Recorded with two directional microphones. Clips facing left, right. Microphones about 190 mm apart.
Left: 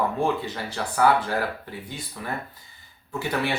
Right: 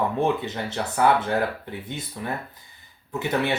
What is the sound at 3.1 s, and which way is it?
Speech, 20° right (ahead or behind).